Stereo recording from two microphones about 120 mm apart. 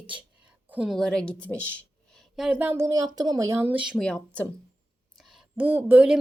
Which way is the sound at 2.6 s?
20° right (ahead or behind).